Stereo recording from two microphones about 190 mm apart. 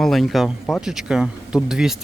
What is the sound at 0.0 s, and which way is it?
Speech, centre (ahead or behind).